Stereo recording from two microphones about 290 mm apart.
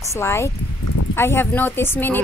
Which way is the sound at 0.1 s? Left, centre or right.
Centre.